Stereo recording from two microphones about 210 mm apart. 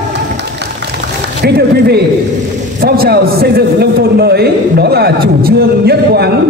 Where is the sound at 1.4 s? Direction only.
50° right (ahead or behind).